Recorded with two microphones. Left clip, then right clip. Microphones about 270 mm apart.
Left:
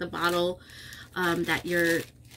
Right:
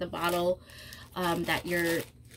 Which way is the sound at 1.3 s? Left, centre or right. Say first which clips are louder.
Left 2 dB; left.